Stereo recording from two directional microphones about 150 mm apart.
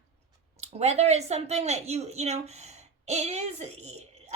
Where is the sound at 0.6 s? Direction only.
45° right (ahead or behind).